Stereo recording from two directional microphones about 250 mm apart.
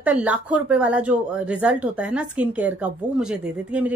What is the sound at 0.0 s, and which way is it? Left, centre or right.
A woman's voice, centre.